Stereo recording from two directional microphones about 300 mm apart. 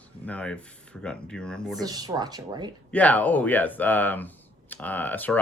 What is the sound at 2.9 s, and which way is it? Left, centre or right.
Speech, centre.